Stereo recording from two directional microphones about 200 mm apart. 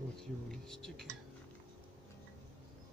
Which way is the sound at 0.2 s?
Centre (ahead or behind).